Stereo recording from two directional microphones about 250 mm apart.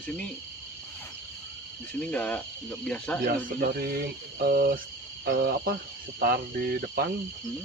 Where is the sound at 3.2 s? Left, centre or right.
Right.